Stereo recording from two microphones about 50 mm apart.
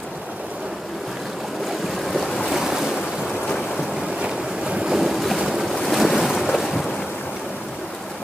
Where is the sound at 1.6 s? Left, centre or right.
Centre.